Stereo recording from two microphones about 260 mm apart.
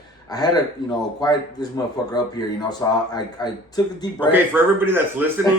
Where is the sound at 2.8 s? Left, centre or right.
Centre.